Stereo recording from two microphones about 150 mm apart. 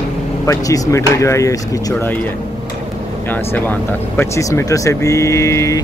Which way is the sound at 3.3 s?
15° left (ahead or behind).